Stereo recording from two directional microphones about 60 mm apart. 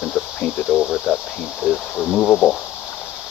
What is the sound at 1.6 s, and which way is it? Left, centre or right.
Speech, centre.